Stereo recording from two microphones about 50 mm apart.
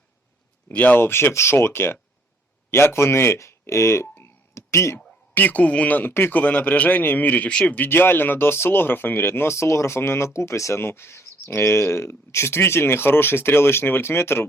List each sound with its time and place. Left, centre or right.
0.7 s speech: left
5.3 s a man's voice: left
6.4 s a man's voice: left
7.9 s speech: left
10.8 s speech: left